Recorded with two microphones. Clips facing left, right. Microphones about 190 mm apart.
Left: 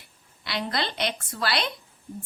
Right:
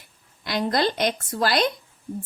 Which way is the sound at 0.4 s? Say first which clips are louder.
Right 7 dB; 45° right (ahead or behind).